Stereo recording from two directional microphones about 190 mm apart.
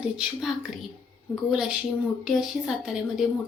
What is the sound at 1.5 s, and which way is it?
A woman's voice, 5° right (ahead or behind).